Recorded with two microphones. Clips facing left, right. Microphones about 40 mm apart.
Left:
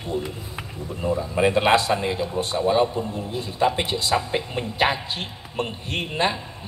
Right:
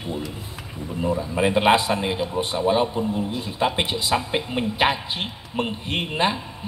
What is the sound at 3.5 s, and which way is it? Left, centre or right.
A man's voice, centre.